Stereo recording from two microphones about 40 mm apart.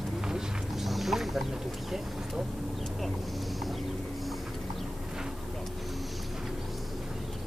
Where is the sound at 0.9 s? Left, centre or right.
Centre.